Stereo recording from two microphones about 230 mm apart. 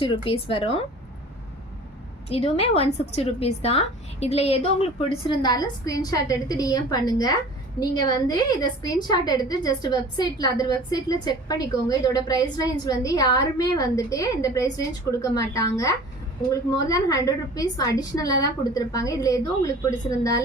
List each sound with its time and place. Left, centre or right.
0.0 s a woman's voice: left
2.3 s a woman's voice: left